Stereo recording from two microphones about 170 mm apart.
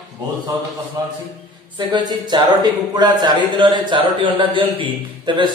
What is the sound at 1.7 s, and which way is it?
Speech, 25° right (ahead or behind).